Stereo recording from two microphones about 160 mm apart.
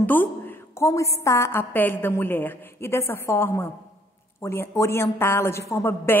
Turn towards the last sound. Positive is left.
turn(degrees=15)  # may be behind; listen again after turning